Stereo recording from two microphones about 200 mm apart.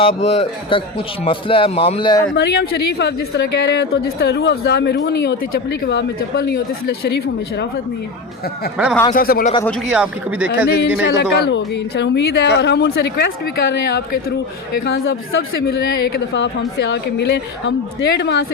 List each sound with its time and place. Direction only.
0.0 s speech: 30° left (ahead or behind)
2.3 s a woman's voice: 55° left (ahead or behind)
9.1 s speech: 45° left (ahead or behind)
9.9 s speech: 5° right (ahead or behind)
11.0 s a woman's voice: 55° left (ahead or behind)
15.6 s a woman's voice: 55° left (ahead or behind)